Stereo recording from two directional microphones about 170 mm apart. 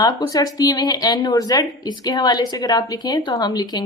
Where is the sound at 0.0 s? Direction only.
25° left (ahead or behind).